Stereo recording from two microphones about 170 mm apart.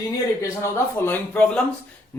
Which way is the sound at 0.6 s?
15° left (ahead or behind).